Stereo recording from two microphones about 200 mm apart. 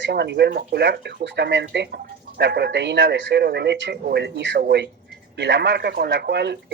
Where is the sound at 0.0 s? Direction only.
60° right (ahead or behind).